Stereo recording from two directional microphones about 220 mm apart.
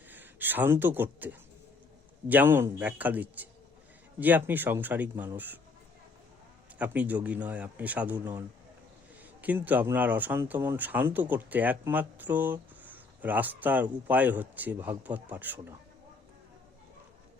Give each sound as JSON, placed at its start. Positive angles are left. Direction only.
{"t": 0.1, "sound": "speech", "side_deg": -10}
{"t": 6.7, "sound": "speech", "side_deg": -5}
{"t": 9.4, "sound": "speech", "side_deg": -5}